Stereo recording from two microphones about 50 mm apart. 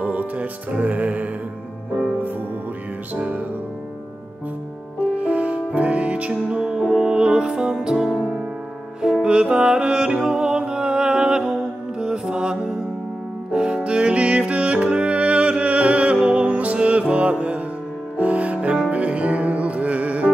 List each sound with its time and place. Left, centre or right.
0.0 s music: right
3.2 s music: right
5.1 s music: right; by 11.5 s centre
12.0 s mantra: centre
13.5 s music: centre